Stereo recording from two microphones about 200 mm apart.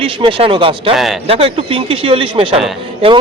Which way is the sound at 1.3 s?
30° right (ahead or behind).